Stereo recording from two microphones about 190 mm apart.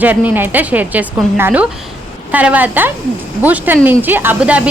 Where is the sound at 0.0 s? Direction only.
10° right (ahead or behind).